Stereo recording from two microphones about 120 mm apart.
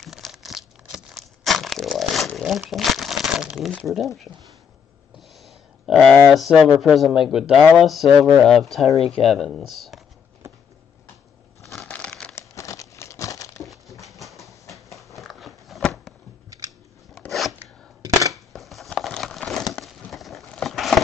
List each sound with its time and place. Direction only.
0.0 s tearing: centre (ahead or behind)
3.8 s speech: centre (ahead or behind)
5.4 s a sound: centre (ahead or behind)
6.1 s speech: centre (ahead or behind)
11.6 s crushing: 5° left (ahead or behind)
12.4 s crumpling: 25° left (ahead or behind)
13.7 s a sound: centre (ahead or behind)
15.1 s biting: centre (ahead or behind)
16.4 s scissors: 30° right (ahead or behind)
17.3 s a sound: centre (ahead or behind)